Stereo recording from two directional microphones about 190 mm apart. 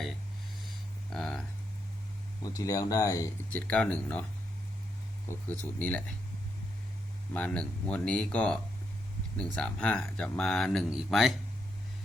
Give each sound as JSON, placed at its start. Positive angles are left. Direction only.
{"t": 1.1, "sound": "a sound", "side_deg": 0}
{"t": 2.4, "sound": "speech", "side_deg": 20}
{"t": 3.7, "sound": "speech", "side_deg": 5}
{"t": 5.8, "sound": "speech", "side_deg": 10}
{"t": 7.3, "sound": "speech", "side_deg": 5}